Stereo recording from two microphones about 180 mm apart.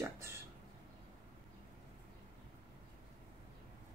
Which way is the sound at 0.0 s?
15° right (ahead or behind).